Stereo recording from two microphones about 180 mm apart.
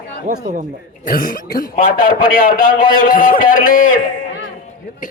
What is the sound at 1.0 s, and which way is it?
A man's voice, 50° left (ahead or behind).